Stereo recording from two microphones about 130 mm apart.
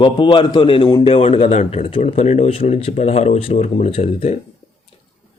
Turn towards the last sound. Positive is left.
turn(degrees=50)  # may be behind; listen again after turning